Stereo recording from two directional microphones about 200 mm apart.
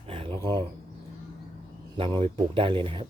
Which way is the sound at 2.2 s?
25° right (ahead or behind).